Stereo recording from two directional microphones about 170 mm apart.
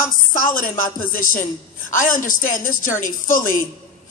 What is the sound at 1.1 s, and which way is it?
A woman's voice, 50° left (ahead or behind).